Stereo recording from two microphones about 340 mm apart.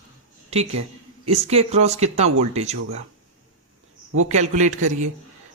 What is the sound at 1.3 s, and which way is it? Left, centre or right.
Speech, centre.